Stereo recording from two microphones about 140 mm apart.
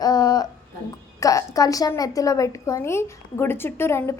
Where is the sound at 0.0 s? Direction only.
30° left (ahead or behind).